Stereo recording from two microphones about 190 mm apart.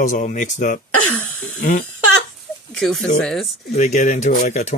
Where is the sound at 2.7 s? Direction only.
Centre (ahead or behind).